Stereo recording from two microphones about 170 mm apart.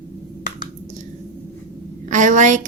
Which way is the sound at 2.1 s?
45° right (ahead or behind).